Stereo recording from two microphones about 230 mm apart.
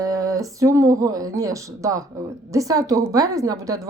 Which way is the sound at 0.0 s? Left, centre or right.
Centre.